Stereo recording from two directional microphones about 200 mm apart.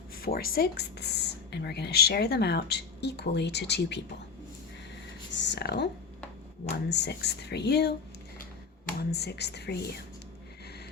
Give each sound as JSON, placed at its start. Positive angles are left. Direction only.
{"t": 0.2, "sound": "speech", "side_deg": 50}
{"t": 5.4, "sound": "speech", "side_deg": 60}
{"t": 9.0, "sound": "speech", "side_deg": 55}